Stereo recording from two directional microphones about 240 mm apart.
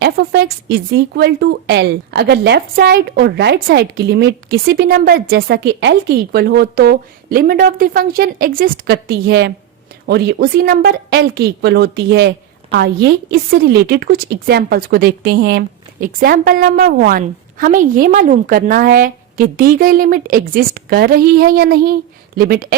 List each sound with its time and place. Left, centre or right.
0.0 s a woman's voice: right